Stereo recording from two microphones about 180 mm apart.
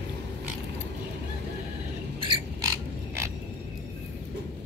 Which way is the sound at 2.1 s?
30° right (ahead or behind).